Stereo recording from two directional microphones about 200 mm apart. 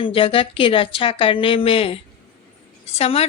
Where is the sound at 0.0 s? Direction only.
25° left (ahead or behind).